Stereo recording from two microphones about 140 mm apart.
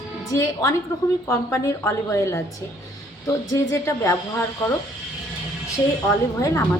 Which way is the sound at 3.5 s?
20° left (ahead or behind).